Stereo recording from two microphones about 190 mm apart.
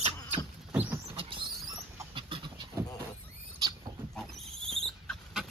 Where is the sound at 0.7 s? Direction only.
10° right (ahead or behind).